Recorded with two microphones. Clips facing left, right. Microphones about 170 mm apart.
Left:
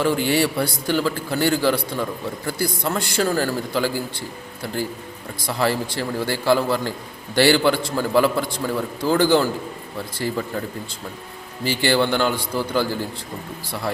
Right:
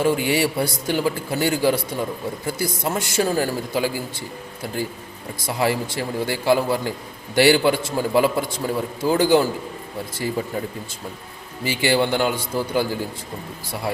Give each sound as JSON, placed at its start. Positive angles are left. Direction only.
{"t": 0.0, "sound": "a man's voice", "side_deg": -15}
{"t": 5.5, "sound": "a man's voice", "side_deg": -15}
{"t": 11.6, "sound": "a man's voice", "side_deg": -15}